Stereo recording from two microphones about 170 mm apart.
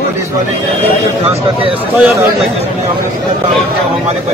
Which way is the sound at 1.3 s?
35° right (ahead or behind).